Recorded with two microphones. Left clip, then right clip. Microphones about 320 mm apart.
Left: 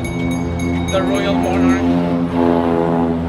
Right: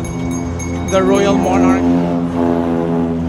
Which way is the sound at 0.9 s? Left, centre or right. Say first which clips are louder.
Right 6 dB; right.